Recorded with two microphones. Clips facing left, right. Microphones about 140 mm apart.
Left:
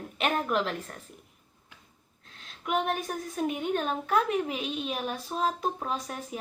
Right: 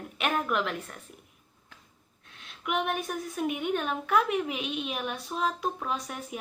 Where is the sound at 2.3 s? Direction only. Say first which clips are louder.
Left 1 dB; 35° left (ahead or behind).